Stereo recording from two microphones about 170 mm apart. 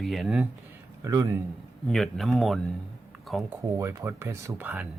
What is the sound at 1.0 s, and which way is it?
Speech, 20° right (ahead or behind).